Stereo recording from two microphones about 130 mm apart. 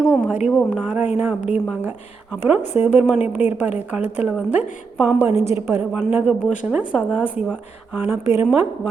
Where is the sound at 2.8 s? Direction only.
15° right (ahead or behind).